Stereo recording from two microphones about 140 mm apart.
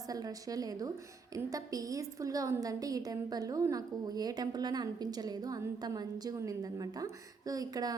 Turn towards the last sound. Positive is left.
turn(degrees=-25)  # may be behind; listen again after turning